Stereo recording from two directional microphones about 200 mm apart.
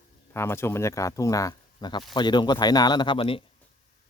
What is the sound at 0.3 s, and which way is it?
Speech, 10° left (ahead or behind).